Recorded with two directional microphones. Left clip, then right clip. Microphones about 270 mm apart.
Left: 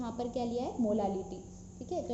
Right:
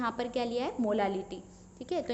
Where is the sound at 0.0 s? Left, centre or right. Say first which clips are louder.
Right 4 dB; right.